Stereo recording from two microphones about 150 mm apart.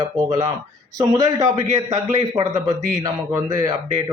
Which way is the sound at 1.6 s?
50° right (ahead or behind).